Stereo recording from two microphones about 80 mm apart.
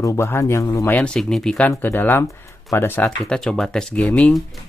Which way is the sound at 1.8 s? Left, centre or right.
Left.